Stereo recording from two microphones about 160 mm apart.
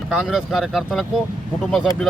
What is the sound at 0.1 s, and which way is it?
Speech, 5° right (ahead or behind).